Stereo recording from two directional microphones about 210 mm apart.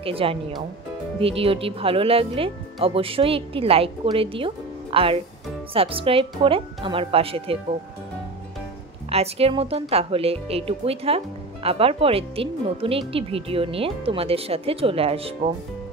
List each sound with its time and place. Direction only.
0.0 s speech: 25° right (ahead or behind)
9.1 s speech: 30° right (ahead or behind)